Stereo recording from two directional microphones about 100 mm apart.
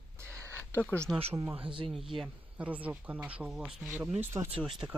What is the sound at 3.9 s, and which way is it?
Speech, 20° right (ahead or behind).